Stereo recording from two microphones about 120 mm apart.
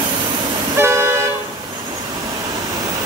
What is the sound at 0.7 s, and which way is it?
Toot, 20° right (ahead or behind).